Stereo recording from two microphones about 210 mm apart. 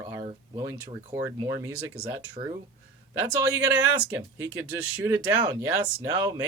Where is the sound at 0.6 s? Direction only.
15° right (ahead or behind).